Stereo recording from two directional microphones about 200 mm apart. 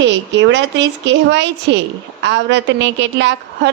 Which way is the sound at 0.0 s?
65° right (ahead or behind).